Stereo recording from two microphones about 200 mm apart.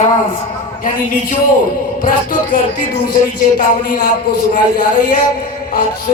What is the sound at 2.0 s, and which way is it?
Chant, 45° left (ahead or behind).